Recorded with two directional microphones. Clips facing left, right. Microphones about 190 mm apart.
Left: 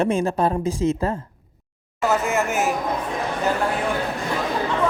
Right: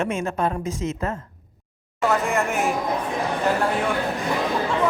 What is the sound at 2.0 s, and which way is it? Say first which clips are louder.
Speech: left 1 dB; 5° left (ahead or behind).